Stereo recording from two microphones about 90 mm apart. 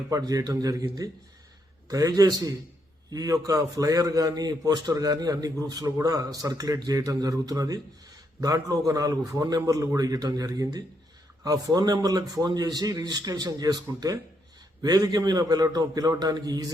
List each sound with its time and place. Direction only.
0.1 s a man's voice: 40° right (ahead or behind)